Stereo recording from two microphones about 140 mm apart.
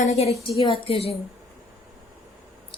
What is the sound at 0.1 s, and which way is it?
A woman's voice, 50° left (ahead or behind).